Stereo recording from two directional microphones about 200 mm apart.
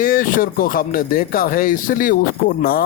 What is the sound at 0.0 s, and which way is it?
Speech, 45° left (ahead or behind).